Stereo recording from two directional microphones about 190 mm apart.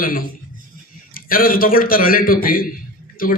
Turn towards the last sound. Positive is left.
turn(degrees=50)  # may be behind; listen again after turning